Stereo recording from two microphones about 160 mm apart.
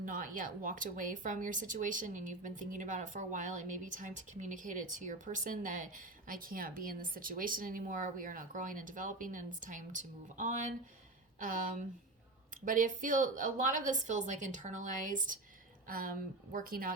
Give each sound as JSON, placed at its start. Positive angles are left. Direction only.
{"t": 0.0, "sound": "a woman's voice", "side_deg": -55}